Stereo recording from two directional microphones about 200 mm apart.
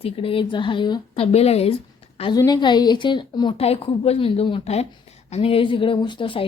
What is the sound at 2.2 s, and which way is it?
A woman's voice, 20° left (ahead or behind).